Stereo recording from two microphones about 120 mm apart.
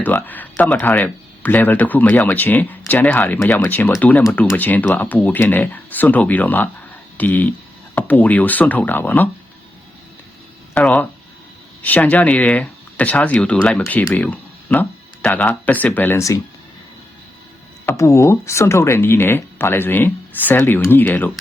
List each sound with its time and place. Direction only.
0.0 s speech: 15° left (ahead or behind)
10.8 s speech: 10° left (ahead or behind)
17.8 s speech: 25° left (ahead or behind)